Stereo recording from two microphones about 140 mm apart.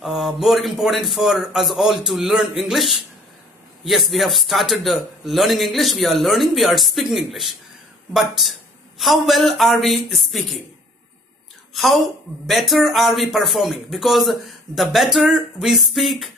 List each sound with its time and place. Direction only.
0.0 s a man's voice: centre (ahead or behind)
11.7 s a woman's voice: centre (ahead or behind)